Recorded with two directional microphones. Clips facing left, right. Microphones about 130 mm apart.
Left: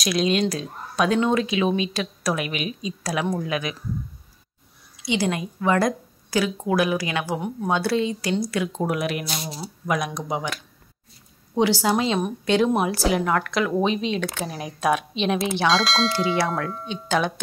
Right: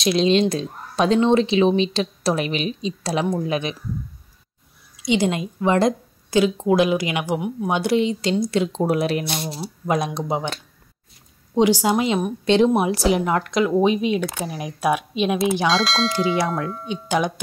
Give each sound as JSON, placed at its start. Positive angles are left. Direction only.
{"t": 0.0, "sound": "a woman's voice", "side_deg": -25}
{"t": 5.0, "sound": "a woman's voice", "side_deg": -20}
{"t": 11.5, "sound": "a woman's voice", "side_deg": -15}
{"t": 15.6, "sound": "speech", "side_deg": 0}
{"t": 16.8, "sound": "a woman's voice", "side_deg": -15}